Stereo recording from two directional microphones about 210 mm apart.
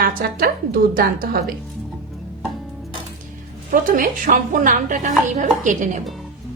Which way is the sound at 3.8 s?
40° right (ahead or behind).